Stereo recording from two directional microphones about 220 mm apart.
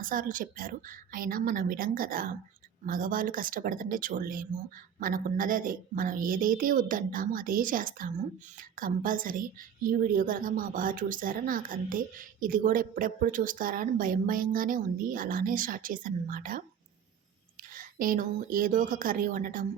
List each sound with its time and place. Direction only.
0.0 s a woman's voice: 40° right (ahead or behind)
17.7 s a woman's voice: 40° right (ahead or behind)